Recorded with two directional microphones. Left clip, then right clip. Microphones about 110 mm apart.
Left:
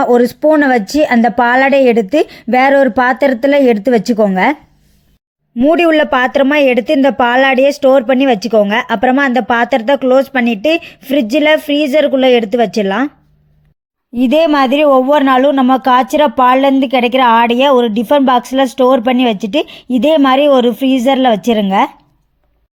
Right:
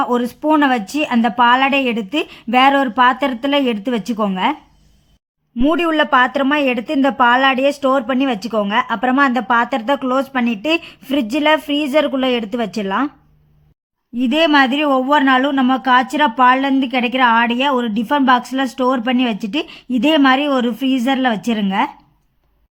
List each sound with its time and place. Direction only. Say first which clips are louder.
0.0 s a woman's voice: left 8 dB; 35° left (ahead or behind)
5.7 s a woman's voice: left 4 dB; 40° left (ahead or behind)
14.2 s a woman's voice: left 3 dB; 35° left (ahead or behind)